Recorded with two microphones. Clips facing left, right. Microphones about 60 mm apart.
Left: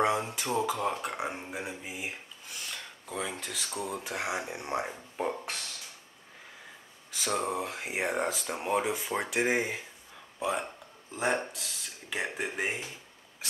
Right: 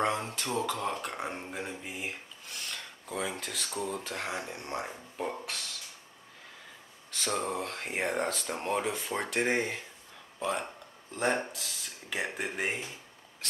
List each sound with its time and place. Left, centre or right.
0.0 s speech: centre
7.1 s speech: centre